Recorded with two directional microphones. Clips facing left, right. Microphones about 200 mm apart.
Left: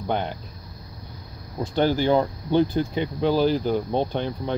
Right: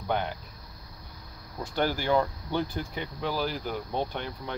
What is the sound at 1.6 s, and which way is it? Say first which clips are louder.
Speech: left 7 dB; 25° left (ahead or behind).